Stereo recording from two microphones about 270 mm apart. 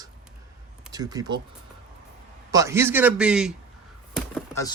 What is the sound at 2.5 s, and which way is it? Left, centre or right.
Speech, centre.